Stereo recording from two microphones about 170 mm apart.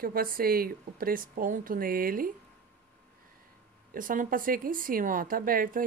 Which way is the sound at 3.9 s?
55° right (ahead or behind).